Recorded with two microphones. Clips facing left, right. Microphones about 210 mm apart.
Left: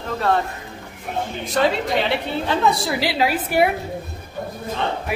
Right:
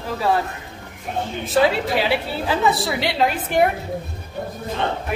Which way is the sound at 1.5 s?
5° right (ahead or behind).